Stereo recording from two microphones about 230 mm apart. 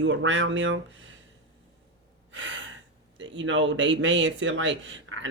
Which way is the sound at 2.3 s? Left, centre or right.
Right.